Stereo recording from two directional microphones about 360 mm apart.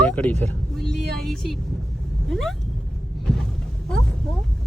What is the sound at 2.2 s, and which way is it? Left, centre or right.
Cat, centre.